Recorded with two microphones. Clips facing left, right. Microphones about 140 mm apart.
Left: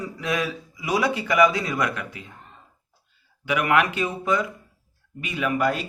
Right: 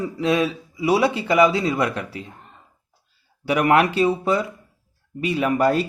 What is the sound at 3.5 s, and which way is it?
Speech, 35° right (ahead or behind).